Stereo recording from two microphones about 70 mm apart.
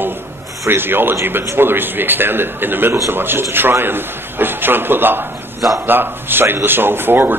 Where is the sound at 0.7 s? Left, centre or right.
Right.